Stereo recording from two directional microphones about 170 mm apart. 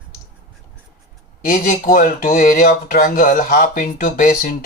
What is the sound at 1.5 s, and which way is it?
Speech, 50° left (ahead or behind).